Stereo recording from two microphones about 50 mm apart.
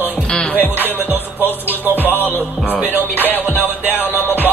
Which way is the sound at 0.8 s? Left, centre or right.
Right.